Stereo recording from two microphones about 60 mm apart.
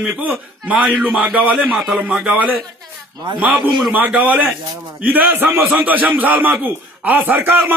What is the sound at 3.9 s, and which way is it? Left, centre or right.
A man's voice, right.